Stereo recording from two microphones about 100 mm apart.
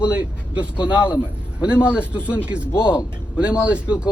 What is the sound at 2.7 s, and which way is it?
Speech, 25° left (ahead or behind).